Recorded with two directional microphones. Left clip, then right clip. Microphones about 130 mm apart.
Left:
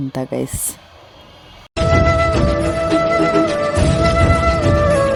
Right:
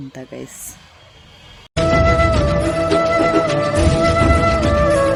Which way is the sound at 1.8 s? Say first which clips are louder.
Even; centre (ahead or behind).